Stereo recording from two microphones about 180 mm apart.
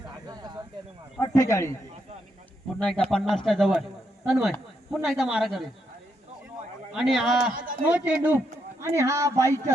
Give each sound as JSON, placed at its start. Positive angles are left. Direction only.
{"t": 0.3, "sound": "a sound", "side_deg": -20}
{"t": 1.2, "sound": "a man's voice", "side_deg": 20}
{"t": 2.7, "sound": "speech", "side_deg": 5}
{"t": 6.9, "sound": "speech", "side_deg": 0}